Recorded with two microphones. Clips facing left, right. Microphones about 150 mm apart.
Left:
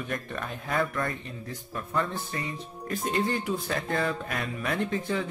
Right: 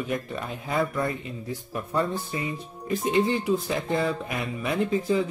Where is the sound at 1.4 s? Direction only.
25° right (ahead or behind).